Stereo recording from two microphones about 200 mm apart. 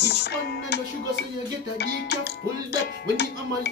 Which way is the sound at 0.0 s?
55° left (ahead or behind).